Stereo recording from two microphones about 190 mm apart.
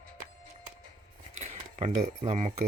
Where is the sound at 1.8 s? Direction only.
30° right (ahead or behind).